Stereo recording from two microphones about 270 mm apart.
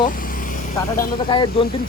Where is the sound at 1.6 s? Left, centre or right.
Centre.